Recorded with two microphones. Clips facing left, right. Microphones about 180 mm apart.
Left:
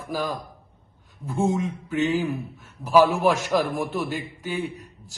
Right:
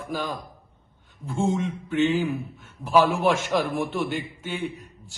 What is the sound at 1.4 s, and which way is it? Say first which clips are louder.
Speech: left 1 dB; centre (ahead or behind).